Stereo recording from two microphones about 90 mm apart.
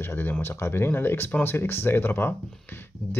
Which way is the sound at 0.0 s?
25° left (ahead or behind).